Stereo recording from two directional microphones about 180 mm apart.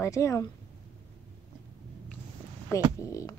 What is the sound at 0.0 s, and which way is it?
Speech, 20° left (ahead or behind).